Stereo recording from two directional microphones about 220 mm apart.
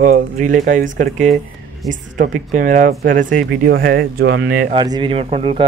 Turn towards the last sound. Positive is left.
turn(degrees=-25)  # may be behind; listen again after turning